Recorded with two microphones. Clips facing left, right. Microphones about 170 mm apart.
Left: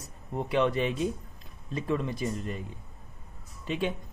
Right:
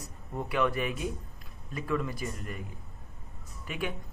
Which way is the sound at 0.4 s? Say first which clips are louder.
Left 3 dB; 25° left (ahead or behind).